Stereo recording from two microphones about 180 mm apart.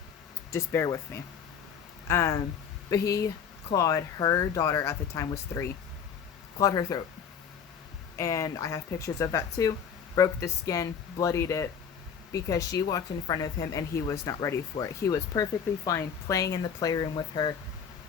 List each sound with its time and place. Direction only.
0.5 s speech: 15° left (ahead or behind)
8.2 s speech: 15° left (ahead or behind)